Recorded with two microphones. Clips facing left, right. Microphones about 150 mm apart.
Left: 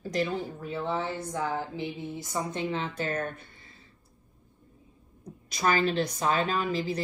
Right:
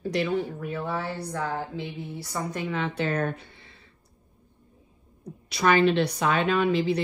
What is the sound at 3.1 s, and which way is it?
Speech, 60° right (ahead or behind).